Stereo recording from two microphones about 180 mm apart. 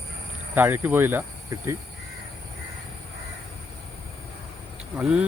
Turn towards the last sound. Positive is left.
turn(degrees=-5)  # may be behind; listen again after turning